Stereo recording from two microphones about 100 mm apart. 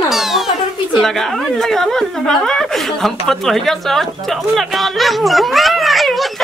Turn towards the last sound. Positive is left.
turn(degrees=0)  # may be behind; listen again after turning